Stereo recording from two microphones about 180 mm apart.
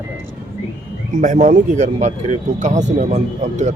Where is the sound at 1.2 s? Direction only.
45° right (ahead or behind).